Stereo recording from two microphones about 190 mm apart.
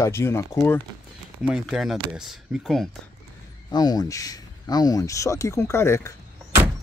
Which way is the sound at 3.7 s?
20° left (ahead or behind).